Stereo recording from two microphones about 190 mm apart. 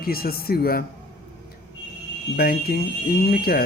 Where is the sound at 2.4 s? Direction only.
55° left (ahead or behind).